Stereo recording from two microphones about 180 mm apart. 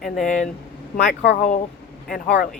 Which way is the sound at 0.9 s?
65° left (ahead or behind).